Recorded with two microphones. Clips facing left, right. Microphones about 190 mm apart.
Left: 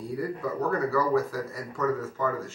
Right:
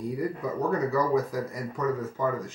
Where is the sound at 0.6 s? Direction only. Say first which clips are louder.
Right 1 dB; 20° right (ahead or behind).